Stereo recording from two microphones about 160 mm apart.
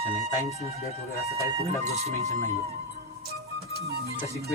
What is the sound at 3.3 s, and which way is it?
Music, 80° right.